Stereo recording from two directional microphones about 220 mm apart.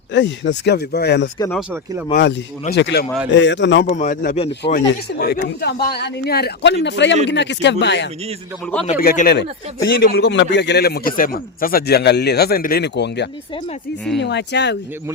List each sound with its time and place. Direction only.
0.1 s speech: 55° left (ahead or behind)
1.7 s speech: 10° right (ahead or behind)
2.7 s speech: 50° left (ahead or behind)
3.8 s a man's voice: 35° left (ahead or behind)
4.6 s speech: 50° left (ahead or behind)
8.6 s a man's voice: 5° left (ahead or behind)
8.9 s speech: 40° left (ahead or behind)